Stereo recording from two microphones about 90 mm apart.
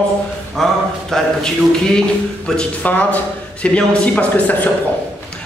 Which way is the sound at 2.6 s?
15° left (ahead or behind).